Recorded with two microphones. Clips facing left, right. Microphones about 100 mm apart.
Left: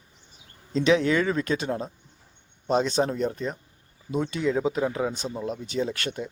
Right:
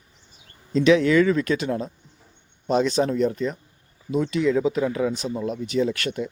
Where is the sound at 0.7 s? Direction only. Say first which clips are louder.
Right 4 dB; 30° left (ahead or behind).